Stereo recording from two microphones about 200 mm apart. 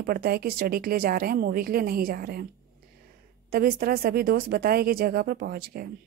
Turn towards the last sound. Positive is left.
turn(degrees=-50)  # may be behind; listen again after turning